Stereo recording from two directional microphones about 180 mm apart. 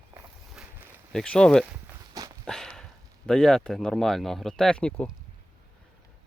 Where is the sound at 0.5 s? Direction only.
Centre (ahead or behind).